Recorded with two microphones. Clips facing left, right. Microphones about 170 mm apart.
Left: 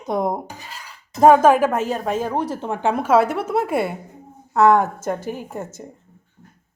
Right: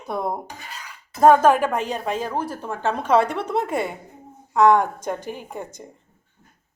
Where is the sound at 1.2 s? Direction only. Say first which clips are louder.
Left 2 dB; 10° left (ahead or behind).